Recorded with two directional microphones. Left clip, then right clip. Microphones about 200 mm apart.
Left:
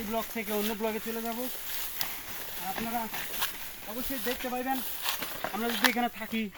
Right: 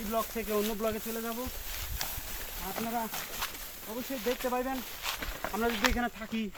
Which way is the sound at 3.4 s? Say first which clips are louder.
Left 3 dB; 50° left (ahead or behind).